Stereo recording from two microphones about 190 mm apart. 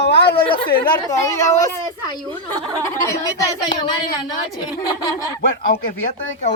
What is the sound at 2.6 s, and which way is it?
Speech, 20° right (ahead or behind).